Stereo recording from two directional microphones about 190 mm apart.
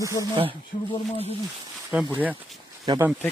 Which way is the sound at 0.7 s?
40° left (ahead or behind).